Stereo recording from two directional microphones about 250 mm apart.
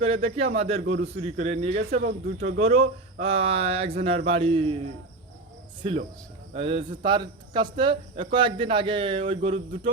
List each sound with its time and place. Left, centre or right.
0.0 s speech: right
2.0 s speech: right
2.6 s speech: right
5.8 s speech: right